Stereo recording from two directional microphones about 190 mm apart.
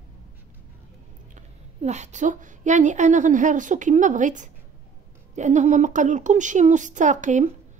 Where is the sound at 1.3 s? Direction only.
35° right (ahead or behind).